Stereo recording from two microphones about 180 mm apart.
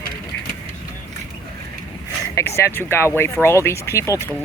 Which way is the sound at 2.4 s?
15° left (ahead or behind).